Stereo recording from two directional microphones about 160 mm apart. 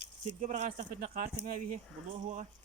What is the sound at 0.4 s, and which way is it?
Speech, 50° right (ahead or behind).